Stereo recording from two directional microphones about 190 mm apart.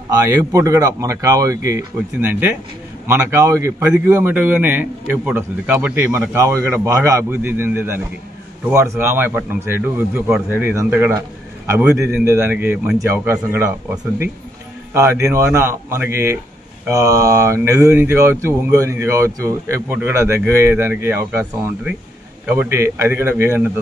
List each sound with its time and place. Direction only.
0.1 s speech: 15° right (ahead or behind)